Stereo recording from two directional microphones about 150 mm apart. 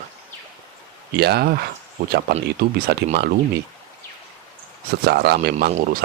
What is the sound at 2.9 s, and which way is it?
Speech, 90° right.